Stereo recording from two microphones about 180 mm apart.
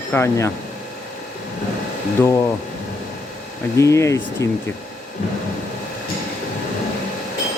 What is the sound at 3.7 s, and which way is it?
Speech, 15° left (ahead or behind).